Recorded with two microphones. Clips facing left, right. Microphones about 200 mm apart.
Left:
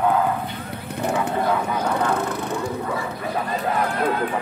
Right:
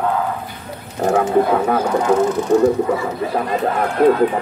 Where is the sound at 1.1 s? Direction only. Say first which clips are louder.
Right 8 dB; 60° right (ahead or behind).